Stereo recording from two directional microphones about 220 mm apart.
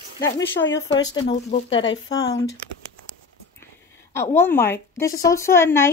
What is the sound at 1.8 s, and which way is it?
Speech, 60° left (ahead or behind).